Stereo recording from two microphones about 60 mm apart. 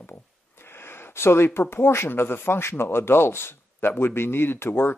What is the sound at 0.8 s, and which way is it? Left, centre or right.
Speech, left.